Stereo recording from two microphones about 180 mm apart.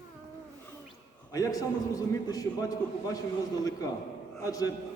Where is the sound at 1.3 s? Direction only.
20° left (ahead or behind).